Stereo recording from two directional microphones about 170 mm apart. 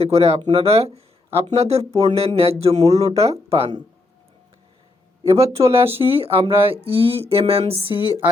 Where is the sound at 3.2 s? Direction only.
35° right (ahead or behind).